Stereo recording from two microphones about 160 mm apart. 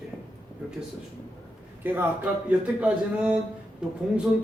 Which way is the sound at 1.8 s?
10° right (ahead or behind).